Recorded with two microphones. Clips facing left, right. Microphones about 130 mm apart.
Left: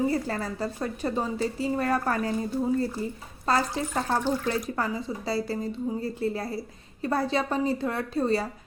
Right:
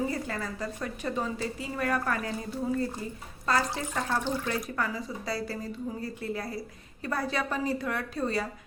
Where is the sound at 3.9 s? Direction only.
35° left (ahead or behind).